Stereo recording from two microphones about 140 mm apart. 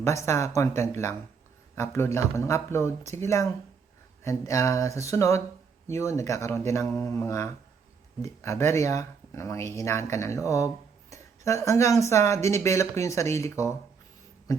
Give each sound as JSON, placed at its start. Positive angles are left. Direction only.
{"t": 0.0, "sound": "speech", "side_deg": 20}